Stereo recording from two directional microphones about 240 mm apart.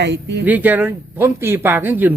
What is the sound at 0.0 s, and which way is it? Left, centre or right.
Speech, right.